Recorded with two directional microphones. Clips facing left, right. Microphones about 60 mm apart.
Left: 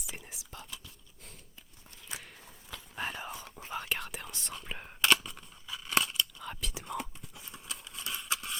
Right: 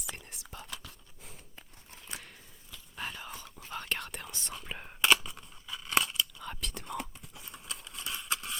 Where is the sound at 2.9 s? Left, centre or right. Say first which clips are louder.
Left 3 dB; centre.